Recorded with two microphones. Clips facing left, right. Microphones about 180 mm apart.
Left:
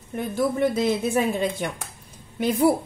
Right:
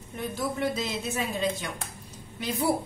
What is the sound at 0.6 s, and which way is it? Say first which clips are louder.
Speech: left 8 dB; 55° left (ahead or behind).